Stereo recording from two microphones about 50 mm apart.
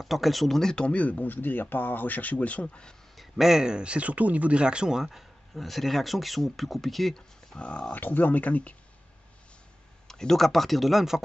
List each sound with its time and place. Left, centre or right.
0.0 s speech: centre
0.8 s speech: left
3.2 s speech: centre
7.2 s speech: left
7.9 s speech: left
10.0 s speech: centre